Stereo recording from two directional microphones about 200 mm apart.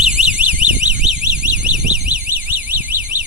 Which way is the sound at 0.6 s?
5° right (ahead or behind).